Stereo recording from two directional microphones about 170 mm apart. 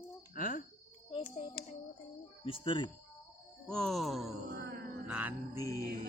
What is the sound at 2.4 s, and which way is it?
Speech, 30° left (ahead or behind).